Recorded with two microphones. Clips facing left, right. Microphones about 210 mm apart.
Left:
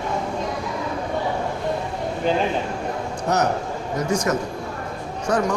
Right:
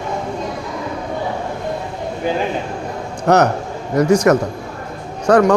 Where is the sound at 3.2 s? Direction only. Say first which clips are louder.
Right 8 dB; 70° right (ahead or behind).